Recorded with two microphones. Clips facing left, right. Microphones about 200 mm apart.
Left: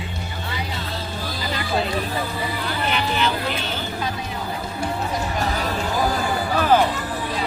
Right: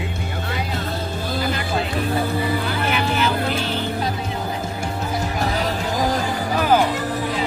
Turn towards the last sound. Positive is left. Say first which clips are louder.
# right 1 dB
turn(degrees=-40)  # may be behind; listen again after turning